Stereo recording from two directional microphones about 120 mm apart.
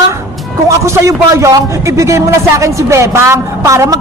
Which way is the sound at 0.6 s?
25° right (ahead or behind).